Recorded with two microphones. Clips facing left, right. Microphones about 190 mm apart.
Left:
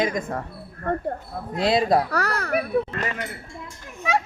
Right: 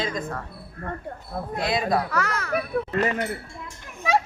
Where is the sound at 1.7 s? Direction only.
35° left (ahead or behind).